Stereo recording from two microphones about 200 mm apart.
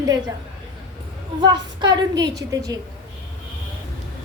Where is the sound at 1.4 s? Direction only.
20° right (ahead or behind).